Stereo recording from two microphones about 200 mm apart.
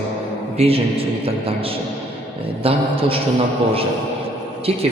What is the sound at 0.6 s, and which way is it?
Speech, 30° right (ahead or behind).